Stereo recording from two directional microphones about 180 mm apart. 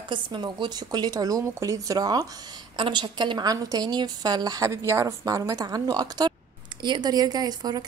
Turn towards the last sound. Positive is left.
turn(degrees=-20)  # may be behind; listen again after turning